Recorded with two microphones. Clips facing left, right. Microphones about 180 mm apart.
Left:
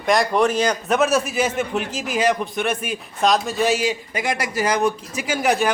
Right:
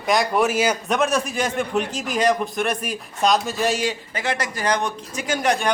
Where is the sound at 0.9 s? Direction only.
5° left (ahead or behind).